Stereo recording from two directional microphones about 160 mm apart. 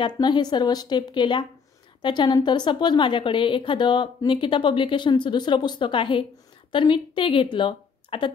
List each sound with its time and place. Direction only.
0.0 s a woman's voice: 30° left (ahead or behind)